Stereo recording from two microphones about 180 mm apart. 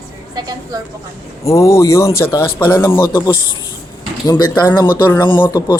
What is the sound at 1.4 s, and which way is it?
Speech, 15° left (ahead or behind).